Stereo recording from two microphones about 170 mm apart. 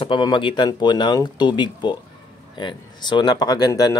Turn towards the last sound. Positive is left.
turn(degrees=20)  # may be behind; listen again after turning